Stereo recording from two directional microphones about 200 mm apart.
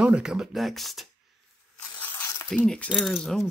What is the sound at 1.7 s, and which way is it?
Zipper, 10° left (ahead or behind).